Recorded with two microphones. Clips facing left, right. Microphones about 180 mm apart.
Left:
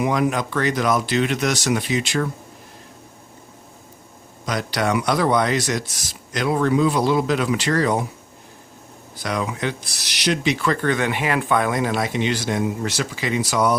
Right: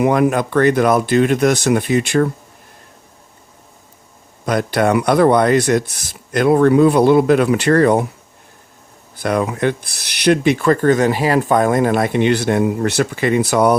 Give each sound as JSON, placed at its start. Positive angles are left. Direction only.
{"t": 0.0, "sound": "speech", "side_deg": -55}
{"t": 4.4, "sound": "speech", "side_deg": -55}
{"t": 9.1, "sound": "speech", "side_deg": -55}